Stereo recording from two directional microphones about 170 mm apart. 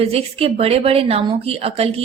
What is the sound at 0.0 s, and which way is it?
Speech, 35° right (ahead or behind).